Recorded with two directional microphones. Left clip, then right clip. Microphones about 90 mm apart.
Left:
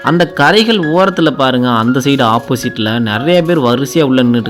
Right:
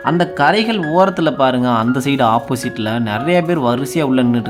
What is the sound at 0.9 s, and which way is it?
Speech, 20° left (ahead or behind).